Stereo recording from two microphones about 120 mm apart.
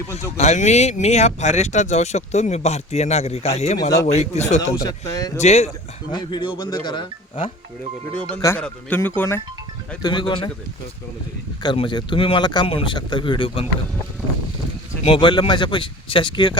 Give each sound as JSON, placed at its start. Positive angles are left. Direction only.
{"t": 0.3, "sound": "speech", "side_deg": 75}
{"t": 4.7, "sound": "speech", "side_deg": 30}
{"t": 5.4, "sound": "speech", "side_deg": 65}
{"t": 6.1, "sound": "speech", "side_deg": 40}
{"t": 8.1, "sound": "speech", "side_deg": 10}
{"t": 10.0, "sound": "speech", "side_deg": 40}
{"t": 11.6, "sound": "speech", "side_deg": 40}
{"t": 15.0, "sound": "speech", "side_deg": 45}